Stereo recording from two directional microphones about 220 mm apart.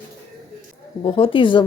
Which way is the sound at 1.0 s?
25° left (ahead or behind).